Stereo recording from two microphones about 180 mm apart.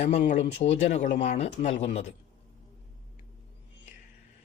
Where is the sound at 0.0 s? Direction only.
40° left (ahead or behind).